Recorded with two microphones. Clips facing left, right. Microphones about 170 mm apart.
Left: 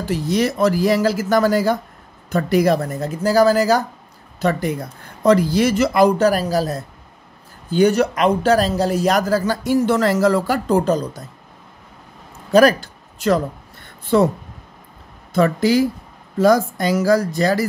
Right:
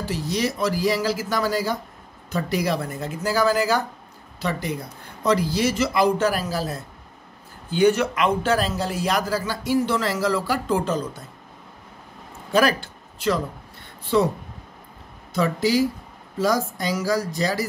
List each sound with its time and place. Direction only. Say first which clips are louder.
0.1 s a man's voice: left 7 dB; 55° left (ahead or behind)
12.5 s speech: left 7 dB; 40° left (ahead or behind)
15.3 s speech: left 5 dB; 55° left (ahead or behind)